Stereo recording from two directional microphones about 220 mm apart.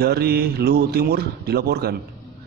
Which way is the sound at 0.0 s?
45° right (ahead or behind).